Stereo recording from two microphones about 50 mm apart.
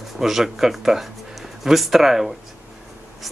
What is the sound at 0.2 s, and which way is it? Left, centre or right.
Speech, centre.